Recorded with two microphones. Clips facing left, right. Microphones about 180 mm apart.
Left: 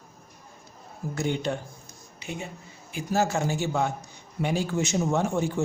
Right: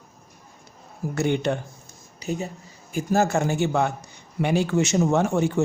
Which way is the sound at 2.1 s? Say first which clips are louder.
Right 7 dB; 40° right (ahead or behind).